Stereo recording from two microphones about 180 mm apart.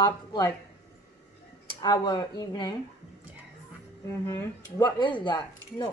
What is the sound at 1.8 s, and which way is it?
Speech, 25° left (ahead or behind).